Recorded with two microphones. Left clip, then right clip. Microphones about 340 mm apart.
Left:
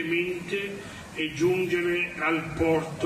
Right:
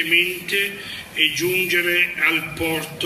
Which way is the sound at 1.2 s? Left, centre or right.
Centre.